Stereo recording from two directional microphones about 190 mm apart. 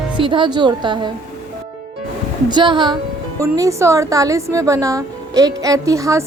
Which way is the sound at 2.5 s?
25° right (ahead or behind).